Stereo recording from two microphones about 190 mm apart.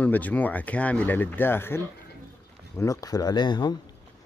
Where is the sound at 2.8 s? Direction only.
15° left (ahead or behind).